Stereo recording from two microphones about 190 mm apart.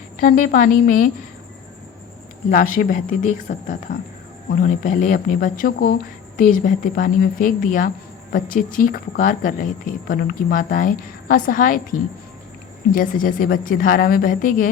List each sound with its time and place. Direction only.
0.2 s speech: 45° left (ahead or behind)
2.5 s speech: 45° left (ahead or behind)